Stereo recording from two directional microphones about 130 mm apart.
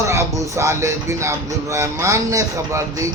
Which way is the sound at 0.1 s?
20° right (ahead or behind).